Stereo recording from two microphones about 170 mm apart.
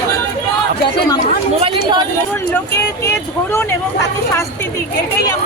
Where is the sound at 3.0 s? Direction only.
15° left (ahead or behind).